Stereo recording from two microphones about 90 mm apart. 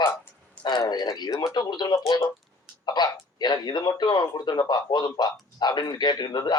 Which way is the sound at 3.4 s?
55° left (ahead or behind).